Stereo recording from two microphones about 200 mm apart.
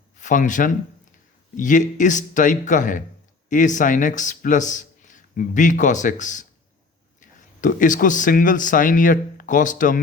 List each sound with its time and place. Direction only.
0.2 s speech: 40° left (ahead or behind)